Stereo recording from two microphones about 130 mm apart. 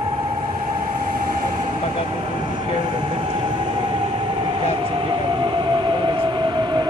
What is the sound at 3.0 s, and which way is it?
Train, 45° right (ahead or behind).